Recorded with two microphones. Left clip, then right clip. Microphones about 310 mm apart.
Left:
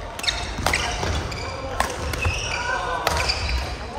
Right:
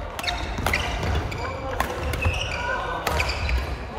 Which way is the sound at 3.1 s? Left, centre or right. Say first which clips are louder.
Left 2 dB; centre.